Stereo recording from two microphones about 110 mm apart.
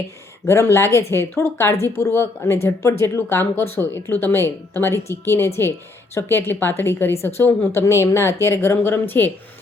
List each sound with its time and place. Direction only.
0.4 s speech: 25° left (ahead or behind)